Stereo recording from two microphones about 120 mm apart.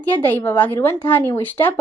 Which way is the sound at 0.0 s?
15° left (ahead or behind).